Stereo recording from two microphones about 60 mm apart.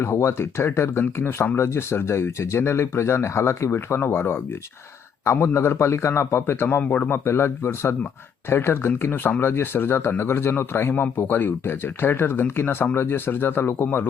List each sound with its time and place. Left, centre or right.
0.0 s speech: left